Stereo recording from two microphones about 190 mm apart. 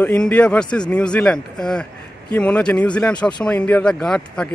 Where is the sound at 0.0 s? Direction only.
5° left (ahead or behind).